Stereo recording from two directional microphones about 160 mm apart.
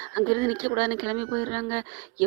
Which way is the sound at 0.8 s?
30° right (ahead or behind).